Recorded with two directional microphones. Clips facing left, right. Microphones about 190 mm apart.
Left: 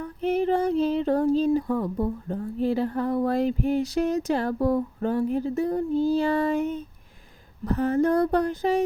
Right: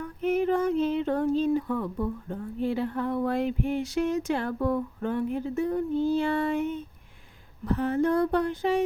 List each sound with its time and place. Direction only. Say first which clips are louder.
0.0 s female singing: left 1 dB; 30° left (ahead or behind)